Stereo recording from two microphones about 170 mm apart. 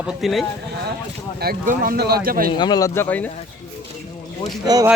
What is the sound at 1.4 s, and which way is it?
Speech, 60° right (ahead or behind).